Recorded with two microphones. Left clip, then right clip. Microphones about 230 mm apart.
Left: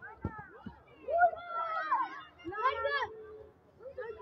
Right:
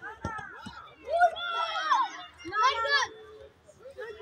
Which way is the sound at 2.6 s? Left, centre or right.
Right.